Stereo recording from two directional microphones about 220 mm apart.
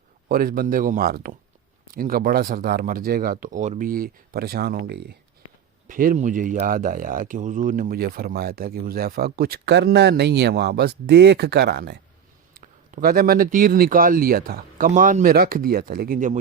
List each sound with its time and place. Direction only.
0.3 s a man's voice: 40° right (ahead or behind)